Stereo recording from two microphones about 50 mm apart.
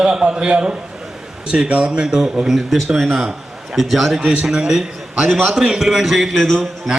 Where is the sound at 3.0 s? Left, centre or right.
Centre.